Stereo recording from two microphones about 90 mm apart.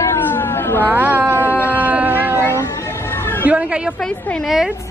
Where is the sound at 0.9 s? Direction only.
20° right (ahead or behind).